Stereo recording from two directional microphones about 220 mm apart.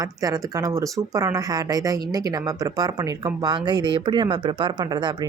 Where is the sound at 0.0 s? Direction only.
15° right (ahead or behind).